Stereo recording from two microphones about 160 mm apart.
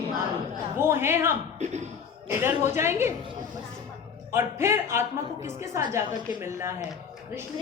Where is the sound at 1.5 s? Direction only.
45° right (ahead or behind).